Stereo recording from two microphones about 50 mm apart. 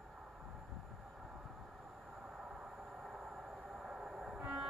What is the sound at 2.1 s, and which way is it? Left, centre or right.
Train, centre.